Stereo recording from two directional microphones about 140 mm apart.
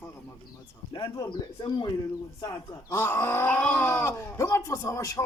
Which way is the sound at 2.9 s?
20° left (ahead or behind).